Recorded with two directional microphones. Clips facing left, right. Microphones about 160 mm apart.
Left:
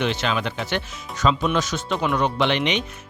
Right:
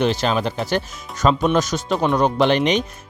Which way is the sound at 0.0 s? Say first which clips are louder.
Right 4 dB; 40° right (ahead or behind).